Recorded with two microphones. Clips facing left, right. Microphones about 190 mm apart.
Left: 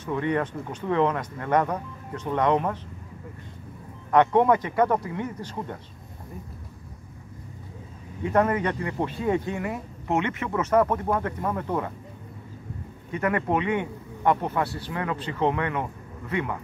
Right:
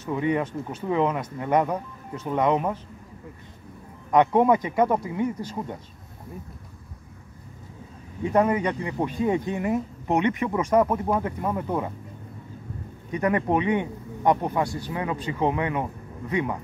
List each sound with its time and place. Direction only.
0.0 s speech: 10° right (ahead or behind)
4.1 s speech: 10° right (ahead or behind)
8.3 s speech: 15° right (ahead or behind)
13.1 s speech: 20° right (ahead or behind)